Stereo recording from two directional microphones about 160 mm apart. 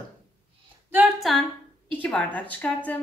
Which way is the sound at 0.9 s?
5° right (ahead or behind).